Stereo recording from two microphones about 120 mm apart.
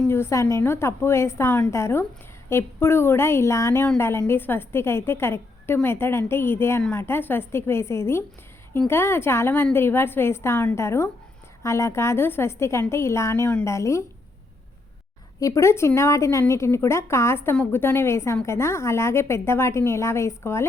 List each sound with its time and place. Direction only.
0.1 s a woman's voice: 20° left (ahead or behind)
15.4 s a woman's voice: 25° left (ahead or behind)